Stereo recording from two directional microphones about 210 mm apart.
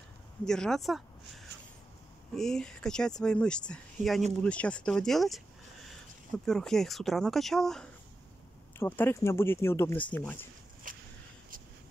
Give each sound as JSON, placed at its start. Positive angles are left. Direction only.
{"t": 0.5, "sound": "speech", "side_deg": 0}
{"t": 2.3, "sound": "speech", "side_deg": 0}
{"t": 10.9, "sound": "a sound", "side_deg": -40}